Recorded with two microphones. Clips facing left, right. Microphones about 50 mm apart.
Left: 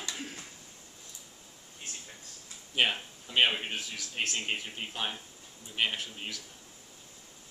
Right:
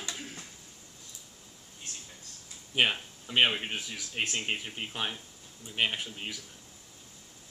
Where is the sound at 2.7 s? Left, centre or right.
Centre.